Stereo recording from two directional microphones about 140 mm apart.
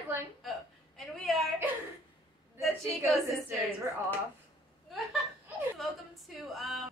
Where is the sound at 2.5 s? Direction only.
Centre (ahead or behind).